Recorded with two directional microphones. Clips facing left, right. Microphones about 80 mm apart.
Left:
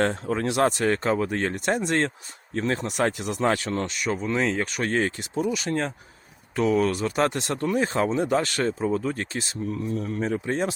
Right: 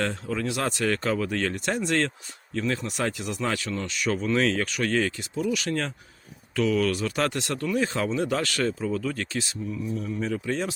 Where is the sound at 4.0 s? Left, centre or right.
Left.